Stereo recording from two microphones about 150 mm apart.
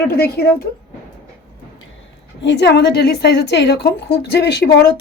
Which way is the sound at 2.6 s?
90° left.